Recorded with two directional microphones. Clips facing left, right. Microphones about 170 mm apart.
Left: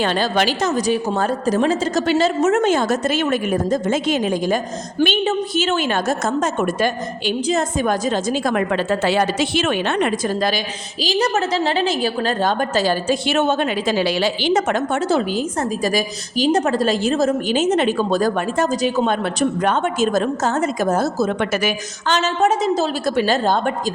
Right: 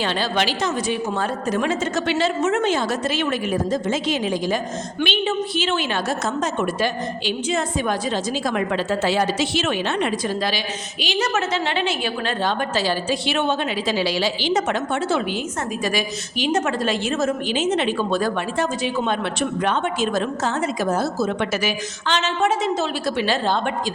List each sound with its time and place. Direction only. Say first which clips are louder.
0.0 s a woman's voice: left 4 dB; 45° left (ahead or behind)
11.0 s a woman's voice: left 4 dB; 35° left (ahead or behind)